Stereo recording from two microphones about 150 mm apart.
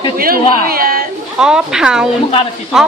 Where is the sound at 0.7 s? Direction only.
75° right (ahead or behind).